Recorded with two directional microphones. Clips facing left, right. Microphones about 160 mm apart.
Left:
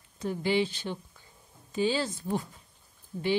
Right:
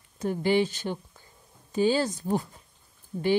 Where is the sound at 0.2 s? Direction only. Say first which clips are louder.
Right 3 dB; 50° right (ahead or behind).